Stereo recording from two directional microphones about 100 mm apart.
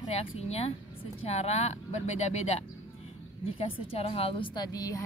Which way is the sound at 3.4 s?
75° left (ahead or behind).